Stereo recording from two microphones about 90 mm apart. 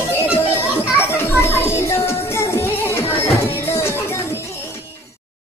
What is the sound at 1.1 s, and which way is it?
Music, 25° left (ahead or behind).